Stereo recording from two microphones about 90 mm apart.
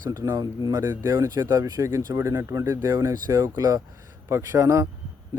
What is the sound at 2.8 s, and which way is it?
A man's voice, 45° right (ahead or behind).